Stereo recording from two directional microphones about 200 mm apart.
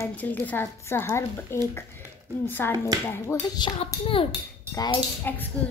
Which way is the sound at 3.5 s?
20° left (ahead or behind).